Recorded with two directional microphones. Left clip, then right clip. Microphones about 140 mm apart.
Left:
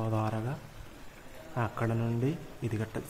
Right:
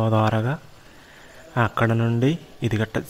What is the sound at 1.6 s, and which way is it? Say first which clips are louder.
A man's voice: right 12 dB; 55° right (ahead or behind).